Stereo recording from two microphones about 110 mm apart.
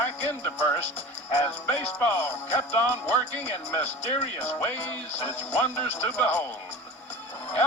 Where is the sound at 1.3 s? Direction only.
20° left (ahead or behind).